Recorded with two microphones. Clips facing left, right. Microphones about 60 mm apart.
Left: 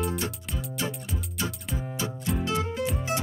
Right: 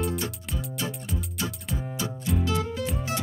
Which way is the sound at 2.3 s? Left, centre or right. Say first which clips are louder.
Right 1 dB; left.